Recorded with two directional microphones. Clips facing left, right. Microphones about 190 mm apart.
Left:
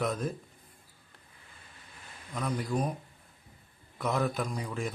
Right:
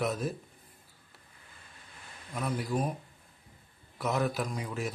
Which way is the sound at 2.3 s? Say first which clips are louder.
Even; 5° right (ahead or behind).